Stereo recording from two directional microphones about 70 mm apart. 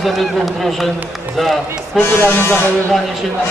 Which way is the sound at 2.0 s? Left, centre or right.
Left.